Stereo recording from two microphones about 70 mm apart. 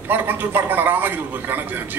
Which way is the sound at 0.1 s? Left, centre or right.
Right.